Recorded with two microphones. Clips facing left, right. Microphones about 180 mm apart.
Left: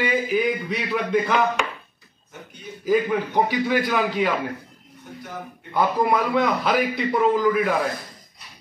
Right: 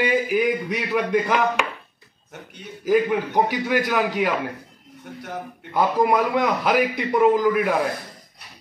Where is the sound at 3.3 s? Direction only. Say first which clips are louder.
Left 2 dB; 10° right (ahead or behind).